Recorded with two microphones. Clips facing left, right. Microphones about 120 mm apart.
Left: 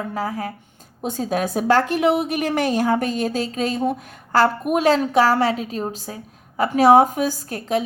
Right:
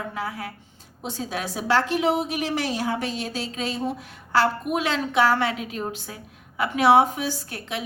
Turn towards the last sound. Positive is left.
turn(degrees=40)  # may be behind; listen again after turning